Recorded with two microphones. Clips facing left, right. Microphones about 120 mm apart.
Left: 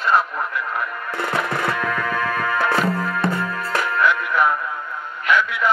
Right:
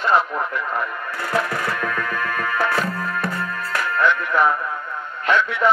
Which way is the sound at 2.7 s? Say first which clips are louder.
Left 3 dB; 25° left (ahead or behind).